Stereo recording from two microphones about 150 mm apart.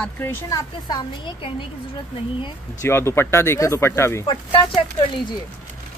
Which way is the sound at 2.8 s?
15° left (ahead or behind).